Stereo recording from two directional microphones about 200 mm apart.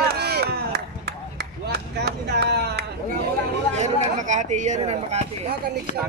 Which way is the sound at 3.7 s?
35° right (ahead or behind).